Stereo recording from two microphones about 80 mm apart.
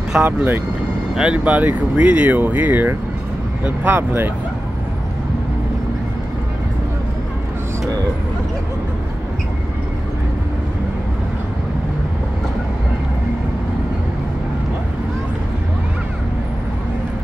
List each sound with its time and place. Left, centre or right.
0.2 s speech: centre